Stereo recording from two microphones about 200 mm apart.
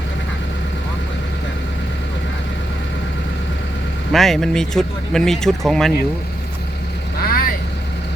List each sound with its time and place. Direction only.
4.1 s speech: centre (ahead or behind)
7.2 s vehicle: 45° left (ahead or behind)